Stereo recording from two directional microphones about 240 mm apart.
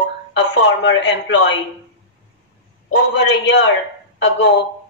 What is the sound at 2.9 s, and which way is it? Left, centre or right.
Speech, left.